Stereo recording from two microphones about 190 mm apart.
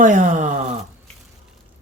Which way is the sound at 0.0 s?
40° right (ahead or behind).